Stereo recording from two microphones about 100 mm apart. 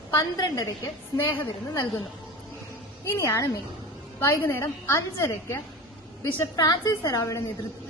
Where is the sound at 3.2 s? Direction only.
30° left (ahead or behind).